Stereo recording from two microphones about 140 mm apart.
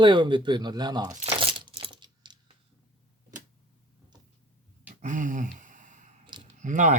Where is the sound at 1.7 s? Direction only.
40° right (ahead or behind).